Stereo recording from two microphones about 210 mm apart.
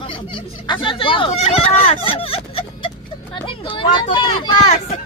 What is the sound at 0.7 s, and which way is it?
Speech, 25° left (ahead or behind).